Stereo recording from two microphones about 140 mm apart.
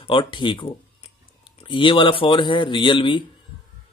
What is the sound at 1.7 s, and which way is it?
Speech, 35° left (ahead or behind).